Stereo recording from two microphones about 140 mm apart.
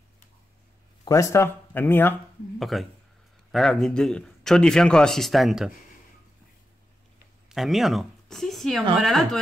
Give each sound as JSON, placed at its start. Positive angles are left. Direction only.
{"t": 1.0, "sound": "speech", "side_deg": 20}
{"t": 2.6, "sound": "a man's voice", "side_deg": 0}
{"t": 7.4, "sound": "a man's voice", "side_deg": 0}